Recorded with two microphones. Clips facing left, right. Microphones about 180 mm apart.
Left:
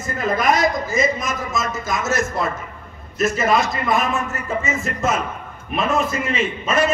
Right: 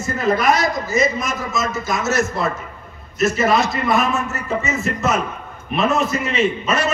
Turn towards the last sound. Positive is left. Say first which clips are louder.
# right 1 dB
turn(degrees=50)  # may be behind; listen again after turning